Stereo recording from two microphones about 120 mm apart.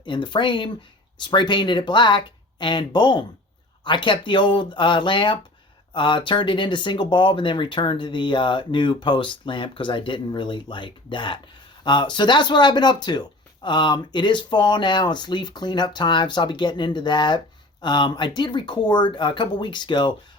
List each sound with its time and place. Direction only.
0.0 s speech: 40° left (ahead or behind)